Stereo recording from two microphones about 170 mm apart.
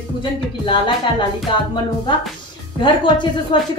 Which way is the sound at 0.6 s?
30° left (ahead or behind).